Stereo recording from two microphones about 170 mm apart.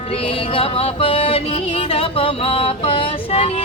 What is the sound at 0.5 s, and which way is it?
Music, 35° left (ahead or behind).